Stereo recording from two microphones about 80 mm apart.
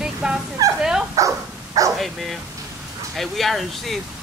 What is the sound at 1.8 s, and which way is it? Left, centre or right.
Dog, right.